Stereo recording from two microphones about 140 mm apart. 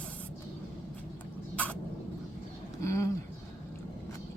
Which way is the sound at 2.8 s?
20° left (ahead or behind).